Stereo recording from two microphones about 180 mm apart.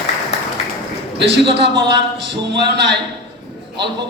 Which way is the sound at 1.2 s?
70° right (ahead or behind).